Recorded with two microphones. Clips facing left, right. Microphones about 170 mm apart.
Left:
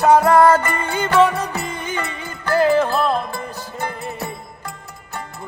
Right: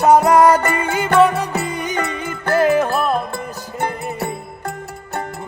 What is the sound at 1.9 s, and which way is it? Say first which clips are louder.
Music: right 3 dB; 50° right (ahead or behind).